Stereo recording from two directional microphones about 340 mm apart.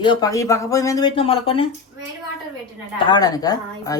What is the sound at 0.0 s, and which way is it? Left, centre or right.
Speech, centre.